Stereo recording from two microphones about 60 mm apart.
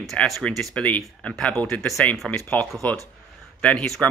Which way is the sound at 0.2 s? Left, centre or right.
Left.